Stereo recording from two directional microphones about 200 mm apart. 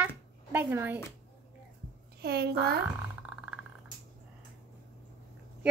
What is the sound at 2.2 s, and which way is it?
Speech, 55° right (ahead or behind).